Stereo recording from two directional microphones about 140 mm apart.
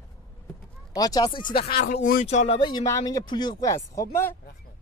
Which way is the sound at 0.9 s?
25° left (ahead or behind).